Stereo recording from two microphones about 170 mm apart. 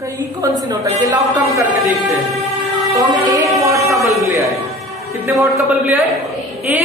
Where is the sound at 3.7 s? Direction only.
15° right (ahead or behind).